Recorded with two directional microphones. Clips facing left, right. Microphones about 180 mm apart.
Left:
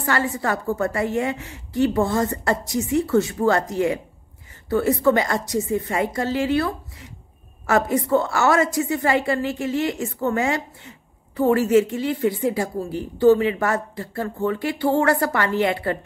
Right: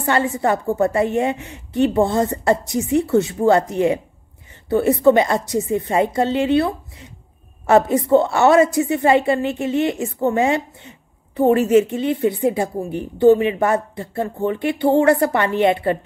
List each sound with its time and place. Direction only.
0.0 s a woman's voice: 25° right (ahead or behind)